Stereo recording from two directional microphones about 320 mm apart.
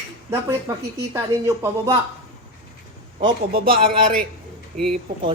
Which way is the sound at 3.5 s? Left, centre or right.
Right.